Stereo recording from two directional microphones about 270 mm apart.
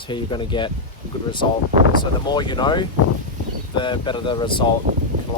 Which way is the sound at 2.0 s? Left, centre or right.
Centre.